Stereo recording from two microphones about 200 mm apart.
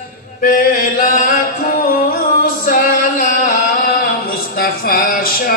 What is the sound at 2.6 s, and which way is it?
Music, 45° left (ahead or behind).